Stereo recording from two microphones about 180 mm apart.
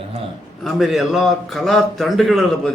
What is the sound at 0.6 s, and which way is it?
A man's voice, centre (ahead or behind).